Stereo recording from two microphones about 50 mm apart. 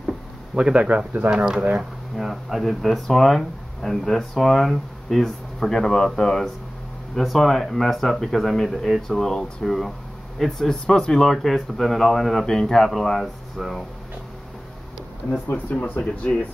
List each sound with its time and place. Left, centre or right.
0.6 s speech: right
1.3 s speech: centre
1.6 s speech: right
2.1 s speech: centre
16.0 s speech: left